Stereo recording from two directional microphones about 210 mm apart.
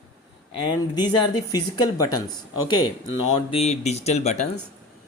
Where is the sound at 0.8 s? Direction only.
20° left (ahead or behind).